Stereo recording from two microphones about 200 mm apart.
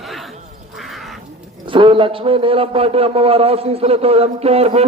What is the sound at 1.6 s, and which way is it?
A man's voice, 25° right (ahead or behind).